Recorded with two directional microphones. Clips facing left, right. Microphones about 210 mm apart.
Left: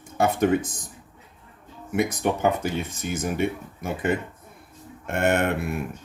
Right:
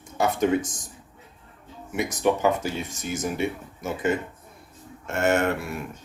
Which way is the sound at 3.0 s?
55° left (ahead or behind).